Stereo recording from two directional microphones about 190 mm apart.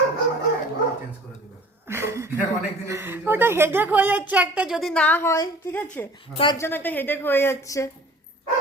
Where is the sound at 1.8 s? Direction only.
15° right (ahead or behind).